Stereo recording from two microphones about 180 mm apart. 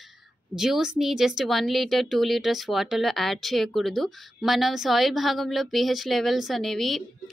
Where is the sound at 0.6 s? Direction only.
5° right (ahead or behind).